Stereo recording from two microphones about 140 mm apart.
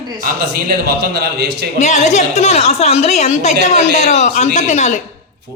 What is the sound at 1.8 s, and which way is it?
A woman's voice, 55° left (ahead or behind).